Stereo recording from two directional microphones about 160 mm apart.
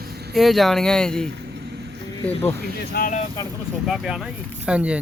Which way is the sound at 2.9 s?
60° left (ahead or behind).